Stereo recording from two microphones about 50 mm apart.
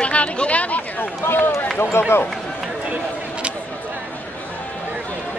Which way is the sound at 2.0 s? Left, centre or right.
Left.